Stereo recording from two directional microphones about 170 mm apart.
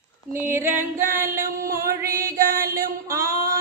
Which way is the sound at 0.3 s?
15° right (ahead or behind).